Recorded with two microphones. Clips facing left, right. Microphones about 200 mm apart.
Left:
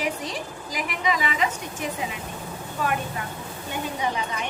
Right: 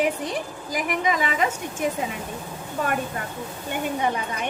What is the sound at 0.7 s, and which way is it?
A woman's voice, 50° right (ahead or behind).